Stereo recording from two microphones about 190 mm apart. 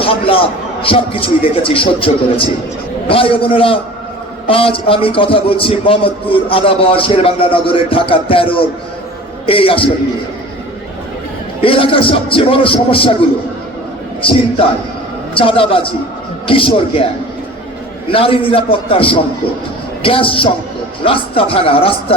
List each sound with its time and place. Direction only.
0.0 s a man's voice: 30° left (ahead or behind)
11.6 s a man's voice: 30° left (ahead or behind)
14.2 s a man's voice: 30° left (ahead or behind)
18.1 s a man's voice: 30° left (ahead or behind)